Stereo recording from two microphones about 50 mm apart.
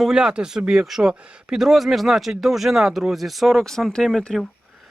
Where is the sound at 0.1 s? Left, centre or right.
Centre.